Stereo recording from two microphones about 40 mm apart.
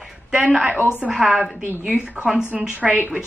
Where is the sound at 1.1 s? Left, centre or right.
Centre.